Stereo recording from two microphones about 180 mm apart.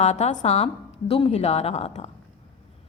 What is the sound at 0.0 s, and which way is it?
A woman's voice, 40° left (ahead or behind).